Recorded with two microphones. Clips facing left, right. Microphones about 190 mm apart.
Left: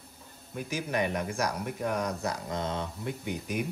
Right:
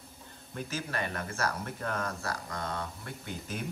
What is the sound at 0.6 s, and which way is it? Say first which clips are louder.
Speech: left 5 dB; 15° left (ahead or behind).